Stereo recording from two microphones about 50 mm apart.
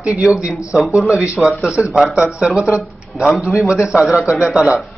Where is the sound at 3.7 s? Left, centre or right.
Centre.